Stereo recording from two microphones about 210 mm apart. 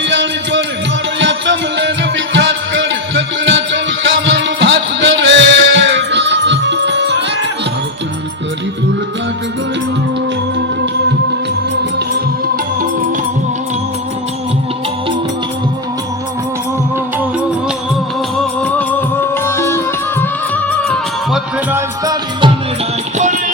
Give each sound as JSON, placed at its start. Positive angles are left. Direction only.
{"t": 0.0, "sound": "music", "side_deg": -60}
{"t": 18.3, "sound": "music", "side_deg": 5}
{"t": 21.7, "sound": "music", "side_deg": -15}
{"t": 23.1, "sound": "music", "side_deg": -35}